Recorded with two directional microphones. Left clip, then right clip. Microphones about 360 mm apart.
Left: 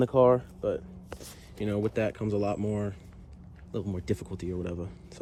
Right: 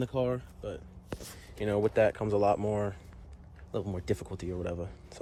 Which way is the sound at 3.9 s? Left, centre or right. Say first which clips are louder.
Even; centre.